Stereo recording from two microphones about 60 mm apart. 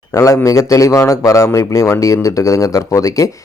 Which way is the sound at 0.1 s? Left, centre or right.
Left.